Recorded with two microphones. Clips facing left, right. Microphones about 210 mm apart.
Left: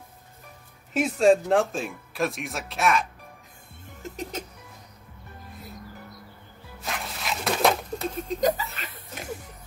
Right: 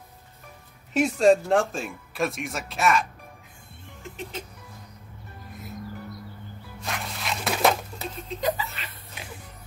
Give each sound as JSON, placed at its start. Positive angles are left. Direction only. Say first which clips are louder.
{"t": 0.9, "sound": "speech", "louder": "right 1 dB", "side_deg": 0}
{"t": 4.0, "sound": "music", "louder": "left 3 dB", "side_deg": 45}
{"t": 6.8, "sound": "dog", "louder": "even", "side_deg": 0}
{"t": 8.1, "sound": "speech", "louder": "left 3 dB", "side_deg": 45}
{"t": 9.1, "sound": "a sound", "louder": "left 8 dB", "side_deg": 45}